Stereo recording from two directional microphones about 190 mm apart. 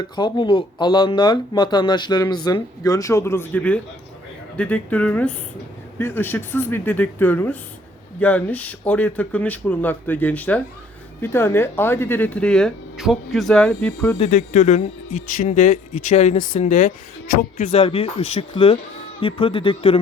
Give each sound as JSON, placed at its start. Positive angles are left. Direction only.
{"t": 0.0, "sound": "speech", "side_deg": 25}
{"t": 14.2, "sound": "speech", "side_deg": 40}
{"t": 17.7, "sound": "speech", "side_deg": 30}